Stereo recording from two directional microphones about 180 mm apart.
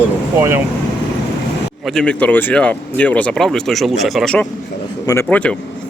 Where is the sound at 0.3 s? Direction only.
15° right (ahead or behind).